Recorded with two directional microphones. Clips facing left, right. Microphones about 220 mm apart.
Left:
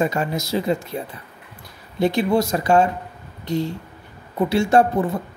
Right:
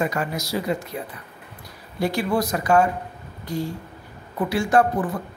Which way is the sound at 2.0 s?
20° left (ahead or behind).